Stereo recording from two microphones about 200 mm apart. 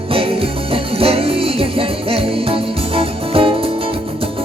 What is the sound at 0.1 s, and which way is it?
Music, 30° right (ahead or behind).